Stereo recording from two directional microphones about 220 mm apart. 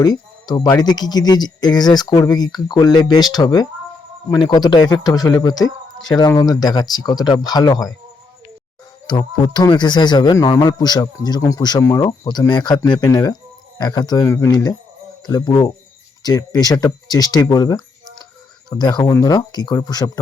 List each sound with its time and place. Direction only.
0.0 s speech: 20° left (ahead or behind)
9.0 s speech: 20° left (ahead or behind)